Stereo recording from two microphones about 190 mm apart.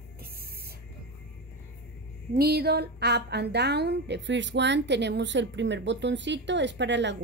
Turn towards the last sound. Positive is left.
turn(degrees=-70)  # may be behind; listen again after turning